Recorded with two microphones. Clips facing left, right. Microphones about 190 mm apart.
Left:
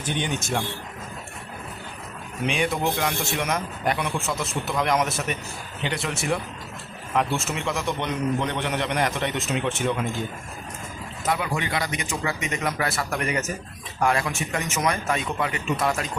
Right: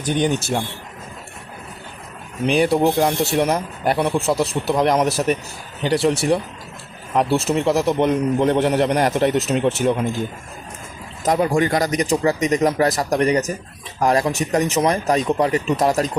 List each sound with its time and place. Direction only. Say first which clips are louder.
0.0 s a man's voice: right 8 dB; 40° right (ahead or behind)
2.5 s speech: right 9 dB; 35° right (ahead or behind)
11.3 s speech: right 9 dB; 40° right (ahead or behind)